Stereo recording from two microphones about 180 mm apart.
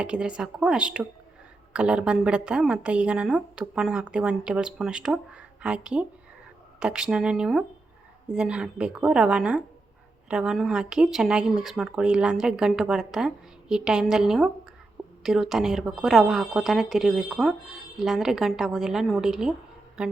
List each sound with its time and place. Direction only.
0.0 s a woman's voice: 5° right (ahead or behind)